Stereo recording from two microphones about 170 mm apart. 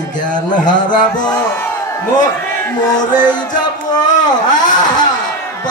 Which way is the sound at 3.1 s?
25° left (ahead or behind).